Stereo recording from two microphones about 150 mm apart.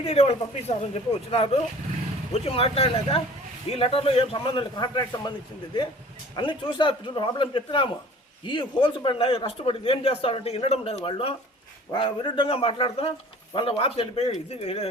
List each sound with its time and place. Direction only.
0.0 s a man's voice: 45° left (ahead or behind)
6.3 s speech: 35° left (ahead or behind)